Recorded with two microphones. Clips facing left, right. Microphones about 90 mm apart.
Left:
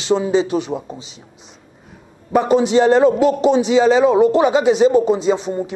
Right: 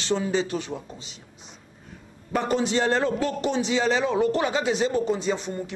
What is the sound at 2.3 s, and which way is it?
A man's voice, 15° left (ahead or behind).